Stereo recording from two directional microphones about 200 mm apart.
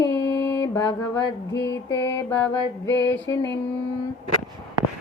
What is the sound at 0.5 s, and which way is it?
Mantra, 20° left (ahead or behind).